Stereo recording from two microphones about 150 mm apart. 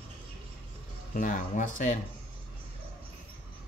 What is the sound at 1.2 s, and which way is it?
Speech, 60° left (ahead or behind).